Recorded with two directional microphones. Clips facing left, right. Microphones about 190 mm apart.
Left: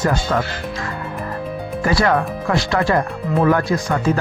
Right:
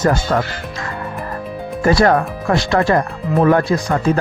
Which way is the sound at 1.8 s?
40° right (ahead or behind).